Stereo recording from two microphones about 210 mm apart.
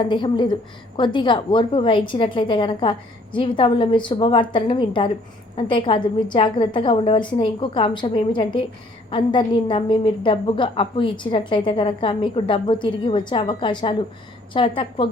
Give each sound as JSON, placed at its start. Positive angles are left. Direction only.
{"t": 0.0, "sound": "a woman's voice", "side_deg": 20}